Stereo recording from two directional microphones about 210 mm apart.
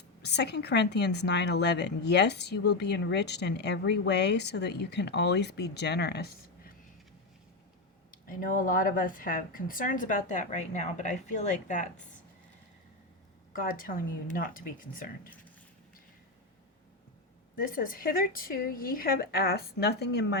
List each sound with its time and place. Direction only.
0.2 s a woman's voice: 50° left (ahead or behind)
8.1 s speech: 40° left (ahead or behind)
13.5 s speech: 40° left (ahead or behind)
17.6 s a woman's voice: 40° left (ahead or behind)